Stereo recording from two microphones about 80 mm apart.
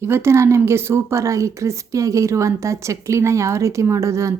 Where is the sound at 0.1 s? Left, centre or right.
Right.